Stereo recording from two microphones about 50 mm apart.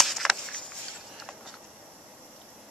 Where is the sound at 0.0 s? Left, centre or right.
Centre.